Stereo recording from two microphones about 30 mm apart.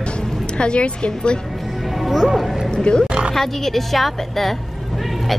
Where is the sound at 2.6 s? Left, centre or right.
Left.